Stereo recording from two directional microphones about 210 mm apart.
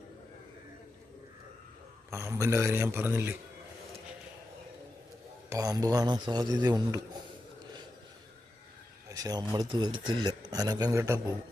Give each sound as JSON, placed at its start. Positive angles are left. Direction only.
{"t": 2.2, "sound": "a man's voice", "side_deg": -15}
{"t": 5.5, "sound": "a man's voice", "side_deg": -15}
{"t": 9.0, "sound": "a man's voice", "side_deg": -15}